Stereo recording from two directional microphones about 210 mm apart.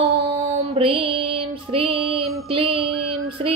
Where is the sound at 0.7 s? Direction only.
25° right (ahead or behind).